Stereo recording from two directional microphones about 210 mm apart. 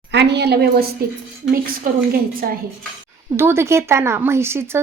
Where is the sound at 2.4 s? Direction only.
40° right (ahead or behind).